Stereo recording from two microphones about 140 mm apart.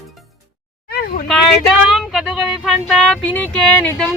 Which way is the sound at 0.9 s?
90° left.